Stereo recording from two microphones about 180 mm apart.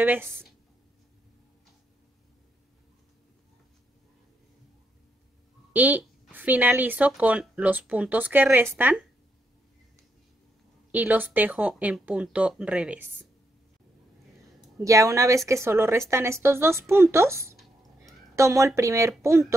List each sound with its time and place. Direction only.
0.0 s speech: 10° right (ahead or behind)
5.7 s speech: 10° right (ahead or behind)
10.9 s speech: 10° right (ahead or behind)
14.8 s a woman's voice: 20° right (ahead or behind)